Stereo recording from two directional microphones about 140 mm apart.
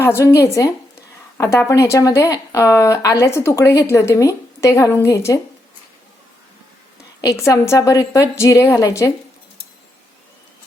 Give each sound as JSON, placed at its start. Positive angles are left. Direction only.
{"t": 0.0, "sound": "a woman's voice", "side_deg": 20}
{"t": 7.2, "sound": "a woman's voice", "side_deg": 25}